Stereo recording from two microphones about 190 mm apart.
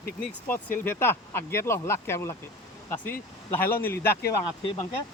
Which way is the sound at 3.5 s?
10° left (ahead or behind).